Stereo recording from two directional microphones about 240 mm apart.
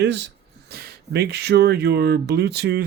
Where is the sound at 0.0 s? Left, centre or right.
Right.